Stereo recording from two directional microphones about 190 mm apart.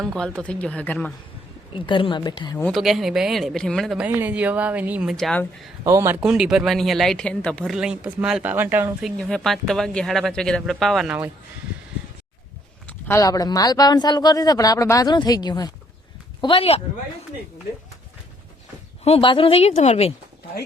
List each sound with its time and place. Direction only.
0.1 s speech: 5° left (ahead or behind)
1.7 s a man's voice: 25° left (ahead or behind)
2.6 s speech: centre (ahead or behind)
5.8 s speech: 15° right (ahead or behind)
12.9 s a man's voice: 15° left (ahead or behind); by 16.8 s 30° left (ahead or behind)
19.0 s a woman's voice: 30° left (ahead or behind)